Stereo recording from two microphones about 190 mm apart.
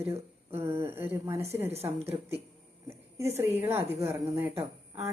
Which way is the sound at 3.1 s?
15° right (ahead or behind).